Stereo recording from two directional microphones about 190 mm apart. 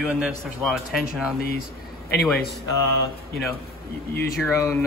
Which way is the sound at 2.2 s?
Centre (ahead or behind).